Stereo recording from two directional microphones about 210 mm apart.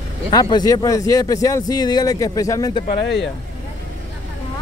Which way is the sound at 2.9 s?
55° left (ahead or behind).